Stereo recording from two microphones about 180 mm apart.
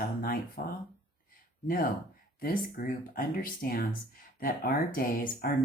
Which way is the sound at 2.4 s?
50° left (ahead or behind).